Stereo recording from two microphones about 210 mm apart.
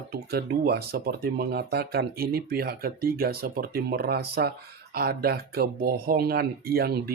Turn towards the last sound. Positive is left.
turn(degrees=-45)  # may be behind; listen again after turning